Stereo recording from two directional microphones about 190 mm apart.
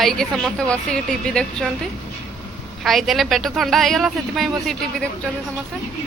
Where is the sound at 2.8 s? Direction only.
Centre (ahead or behind).